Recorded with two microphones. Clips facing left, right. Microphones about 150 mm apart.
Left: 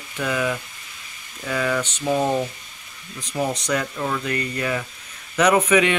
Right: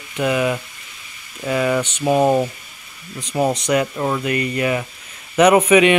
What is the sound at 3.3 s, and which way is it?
Speech, 20° right (ahead or behind).